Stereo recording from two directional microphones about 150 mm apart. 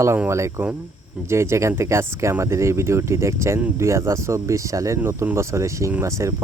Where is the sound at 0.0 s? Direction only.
20° right (ahead or behind).